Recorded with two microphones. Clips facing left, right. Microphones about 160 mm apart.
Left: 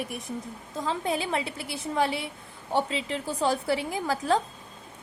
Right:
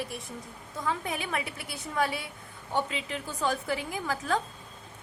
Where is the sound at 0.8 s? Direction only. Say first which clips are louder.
Left 4 dB; 30° left (ahead or behind).